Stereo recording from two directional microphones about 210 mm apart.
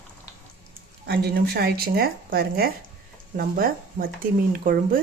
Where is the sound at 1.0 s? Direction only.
50° right (ahead or behind).